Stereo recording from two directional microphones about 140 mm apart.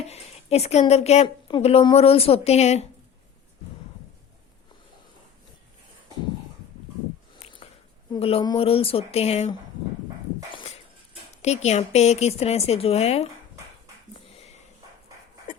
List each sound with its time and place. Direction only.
0.0 s a woman's voice: 50° left (ahead or behind)
8.2 s a woman's voice: 45° left (ahead or behind)
11.4 s a woman's voice: 50° left (ahead or behind)